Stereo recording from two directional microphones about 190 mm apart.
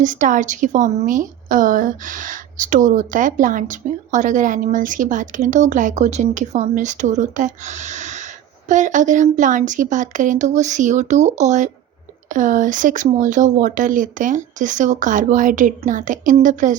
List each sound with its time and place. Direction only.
0.0 s a woman's voice: 45° right (ahead or behind)